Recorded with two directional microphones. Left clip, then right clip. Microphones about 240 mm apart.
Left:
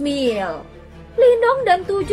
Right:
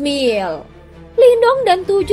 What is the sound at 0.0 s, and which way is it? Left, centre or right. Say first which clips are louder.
Speech: right 4 dB; right.